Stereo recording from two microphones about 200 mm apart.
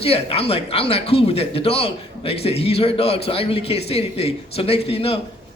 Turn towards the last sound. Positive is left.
turn(degrees=30)  # may be behind; listen again after turning